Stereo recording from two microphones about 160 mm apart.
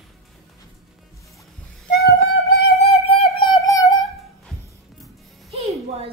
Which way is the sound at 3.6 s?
20° left (ahead or behind).